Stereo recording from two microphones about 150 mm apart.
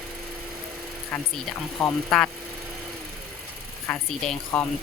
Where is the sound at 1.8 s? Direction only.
5° left (ahead or behind).